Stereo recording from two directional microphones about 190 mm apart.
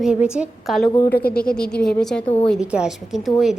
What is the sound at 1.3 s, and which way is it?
A woman's voice, 5° left (ahead or behind).